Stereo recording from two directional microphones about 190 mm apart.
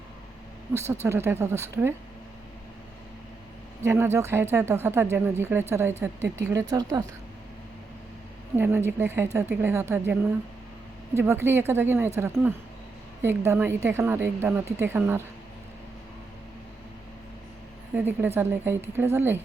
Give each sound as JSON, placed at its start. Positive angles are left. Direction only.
{"t": 0.7, "sound": "a woman's voice", "side_deg": -15}
{"t": 3.8, "sound": "a woman's voice", "side_deg": -15}
{"t": 8.5, "sound": "a woman's voice", "side_deg": -10}
{"t": 17.9, "sound": "a woman's voice", "side_deg": -10}